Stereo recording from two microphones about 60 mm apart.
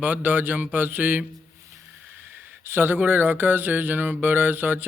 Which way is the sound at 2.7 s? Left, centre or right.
Right.